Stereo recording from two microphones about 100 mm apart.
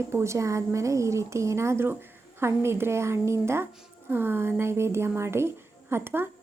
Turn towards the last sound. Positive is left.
turn(degrees=-20)  # may be behind; listen again after turning